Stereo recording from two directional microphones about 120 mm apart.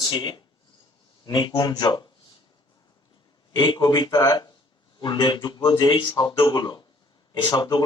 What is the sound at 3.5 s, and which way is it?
A man's voice, 35° left (ahead or behind).